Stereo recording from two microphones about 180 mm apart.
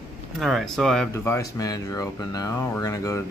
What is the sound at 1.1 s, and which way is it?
Speech, 15° left (ahead or behind).